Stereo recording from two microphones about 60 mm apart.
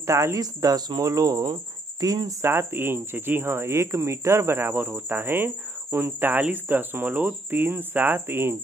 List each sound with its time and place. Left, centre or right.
0.0 s speech: right
2.4 s speech: right